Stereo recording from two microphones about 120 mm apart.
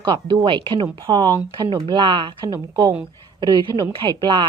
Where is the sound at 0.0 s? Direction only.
40° right (ahead or behind).